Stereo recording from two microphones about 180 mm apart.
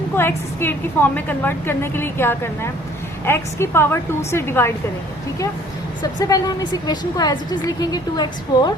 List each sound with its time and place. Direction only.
0.2 s a woman's voice: 10° left (ahead or behind)
6.0 s a woman's voice: 20° left (ahead or behind)